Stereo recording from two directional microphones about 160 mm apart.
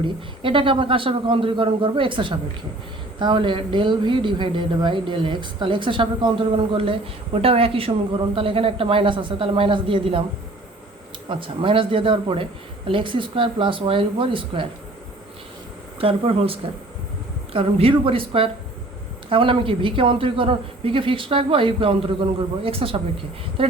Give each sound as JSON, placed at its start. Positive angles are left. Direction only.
{"t": 0.0, "sound": "speech", "side_deg": -35}
{"t": 11.3, "sound": "speech", "side_deg": -30}
{"t": 16.0, "sound": "speech", "side_deg": -35}